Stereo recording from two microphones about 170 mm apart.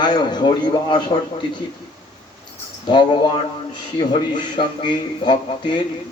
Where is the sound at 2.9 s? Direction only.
25° left (ahead or behind).